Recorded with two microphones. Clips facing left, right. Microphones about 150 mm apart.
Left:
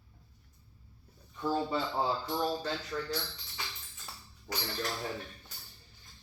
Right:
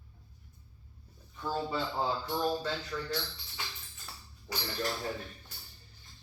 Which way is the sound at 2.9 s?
30° left (ahead or behind).